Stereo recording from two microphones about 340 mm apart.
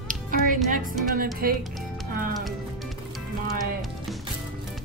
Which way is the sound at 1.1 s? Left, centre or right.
Right.